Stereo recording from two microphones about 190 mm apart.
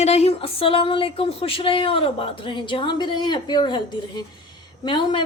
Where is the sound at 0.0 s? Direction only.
35° left (ahead or behind).